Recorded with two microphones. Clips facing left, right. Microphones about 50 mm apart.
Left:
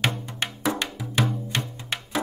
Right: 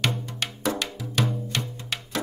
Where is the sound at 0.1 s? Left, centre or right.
Left.